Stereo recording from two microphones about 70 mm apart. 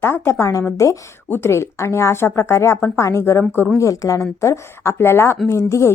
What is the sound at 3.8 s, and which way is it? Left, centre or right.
A woman's voice, left.